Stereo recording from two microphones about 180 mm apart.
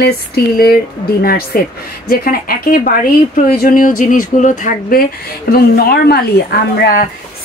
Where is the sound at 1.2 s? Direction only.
55° left (ahead or behind).